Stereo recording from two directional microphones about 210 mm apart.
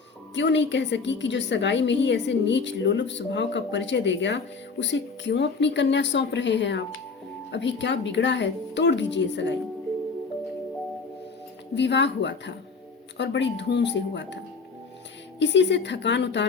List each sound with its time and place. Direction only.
0.3 s a woman's voice: 60° left (ahead or behind)
11.7 s a woman's voice: 55° left (ahead or behind)
15.4 s a woman's voice: 55° left (ahead or behind)